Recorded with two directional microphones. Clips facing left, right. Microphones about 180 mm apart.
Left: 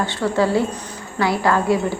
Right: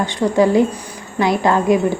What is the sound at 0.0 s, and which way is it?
Speech, 15° right (ahead or behind).